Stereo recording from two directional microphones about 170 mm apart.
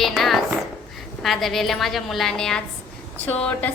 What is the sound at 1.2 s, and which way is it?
A woman's voice, centre (ahead or behind).